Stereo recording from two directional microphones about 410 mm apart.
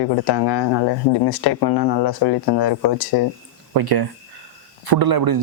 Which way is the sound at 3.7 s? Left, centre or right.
Right.